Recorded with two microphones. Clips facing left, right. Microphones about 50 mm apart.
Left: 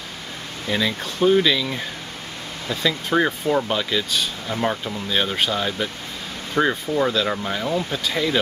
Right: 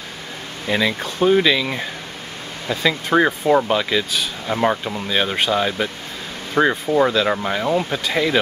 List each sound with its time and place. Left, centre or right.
0.7 s speech: centre